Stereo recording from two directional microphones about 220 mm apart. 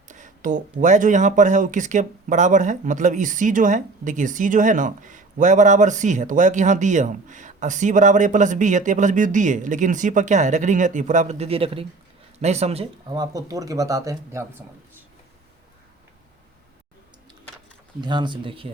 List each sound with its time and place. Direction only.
0.1 s speech: 35° right (ahead or behind); by 14.6 s 15° right (ahead or behind)
18.0 s speech: 20° right (ahead or behind)